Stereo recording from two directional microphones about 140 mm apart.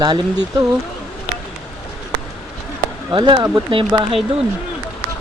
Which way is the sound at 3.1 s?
30° right (ahead or behind).